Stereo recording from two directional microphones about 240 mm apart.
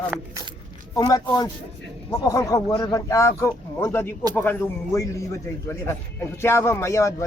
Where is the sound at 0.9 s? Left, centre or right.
Centre.